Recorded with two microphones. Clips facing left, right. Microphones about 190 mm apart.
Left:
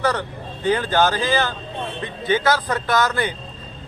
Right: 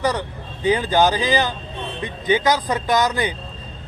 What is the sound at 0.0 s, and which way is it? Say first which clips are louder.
Speech: even; 10° right (ahead or behind).